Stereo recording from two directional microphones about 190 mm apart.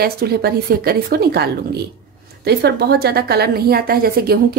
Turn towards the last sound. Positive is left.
turn(degrees=-55)  # may be behind; listen again after turning